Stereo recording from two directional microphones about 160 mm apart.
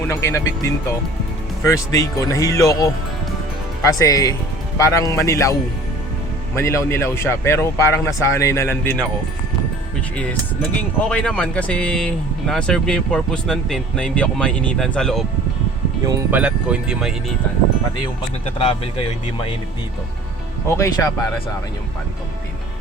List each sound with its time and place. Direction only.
0.1 s speech: 15° left (ahead or behind)
6.6 s speech: 15° left (ahead or behind)
10.2 s speech: 10° left (ahead or behind)
16.3 s speech: 5° right (ahead or behind)
20.7 s speech: 15° left (ahead or behind)